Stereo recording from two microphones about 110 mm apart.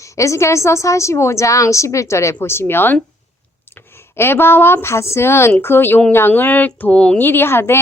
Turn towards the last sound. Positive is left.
turn(degrees=20)  # may be behind; listen again after turning